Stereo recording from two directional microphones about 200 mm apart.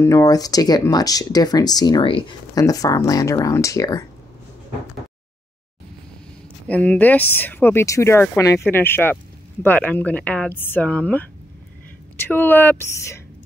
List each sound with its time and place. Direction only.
0.0 s speech: 15° left (ahead or behind)
6.7 s speech: 5° left (ahead or behind)